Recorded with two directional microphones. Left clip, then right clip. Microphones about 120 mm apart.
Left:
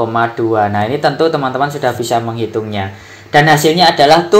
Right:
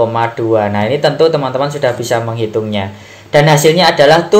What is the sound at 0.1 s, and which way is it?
Speech, 30° left (ahead or behind).